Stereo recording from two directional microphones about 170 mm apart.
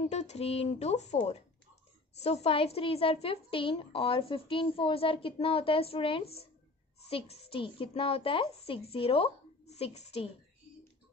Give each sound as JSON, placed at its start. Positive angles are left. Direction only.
{"t": 0.1, "sound": "a woman's voice", "side_deg": 40}